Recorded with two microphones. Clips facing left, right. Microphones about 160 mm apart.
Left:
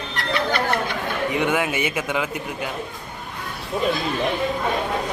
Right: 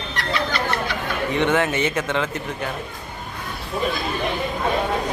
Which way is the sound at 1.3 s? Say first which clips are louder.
Right 3 dB; 10° left (ahead or behind).